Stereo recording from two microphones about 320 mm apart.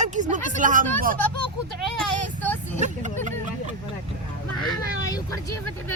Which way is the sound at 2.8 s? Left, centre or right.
Right.